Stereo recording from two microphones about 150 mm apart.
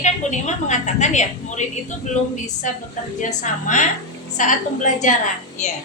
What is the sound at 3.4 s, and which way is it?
A woman's voice, 55° left (ahead or behind).